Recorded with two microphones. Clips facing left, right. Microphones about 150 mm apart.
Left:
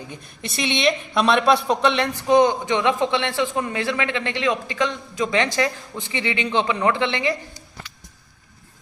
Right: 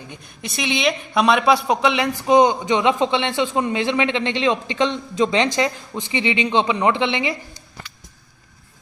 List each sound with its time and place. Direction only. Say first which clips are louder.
0.1 s a man's voice: even; centre (ahead or behind)
2.2 s a man's voice: right 2 dB; 20° right (ahead or behind)